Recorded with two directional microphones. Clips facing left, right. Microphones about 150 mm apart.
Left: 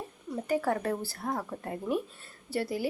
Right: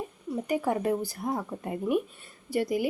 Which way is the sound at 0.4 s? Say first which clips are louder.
Right 1 dB; 15° right (ahead or behind).